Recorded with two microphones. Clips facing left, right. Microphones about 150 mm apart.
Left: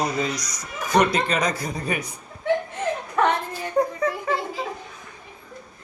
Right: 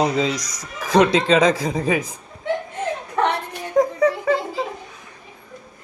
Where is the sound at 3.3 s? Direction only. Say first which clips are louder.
Even; 85° right.